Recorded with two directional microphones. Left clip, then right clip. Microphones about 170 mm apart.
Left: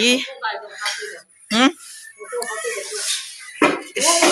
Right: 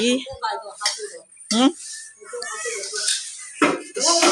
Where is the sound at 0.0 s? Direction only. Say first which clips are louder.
Left 4 dB; 15° right (ahead or behind).